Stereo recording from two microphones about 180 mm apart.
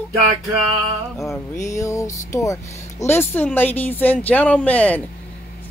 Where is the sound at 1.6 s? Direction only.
15° left (ahead or behind).